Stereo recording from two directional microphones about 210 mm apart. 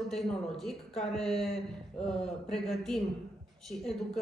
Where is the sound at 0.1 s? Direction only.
Centre (ahead or behind).